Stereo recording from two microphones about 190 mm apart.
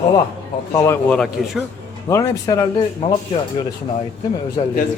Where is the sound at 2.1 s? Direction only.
20° left (ahead or behind).